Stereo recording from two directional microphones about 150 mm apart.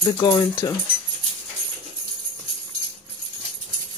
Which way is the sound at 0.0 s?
25° left (ahead or behind).